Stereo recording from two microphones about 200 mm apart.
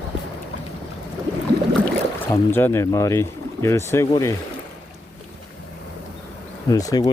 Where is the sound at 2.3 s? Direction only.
10° left (ahead or behind).